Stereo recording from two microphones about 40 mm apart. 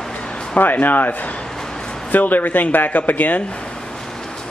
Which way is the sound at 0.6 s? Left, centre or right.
Left.